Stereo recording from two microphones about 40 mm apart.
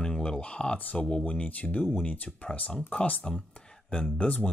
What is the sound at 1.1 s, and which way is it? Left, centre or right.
Speech, left.